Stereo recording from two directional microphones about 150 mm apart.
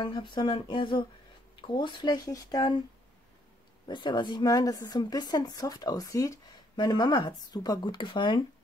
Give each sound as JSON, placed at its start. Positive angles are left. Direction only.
{"t": 0.0, "sound": "speech", "side_deg": 30}
{"t": 3.8, "sound": "speech", "side_deg": 30}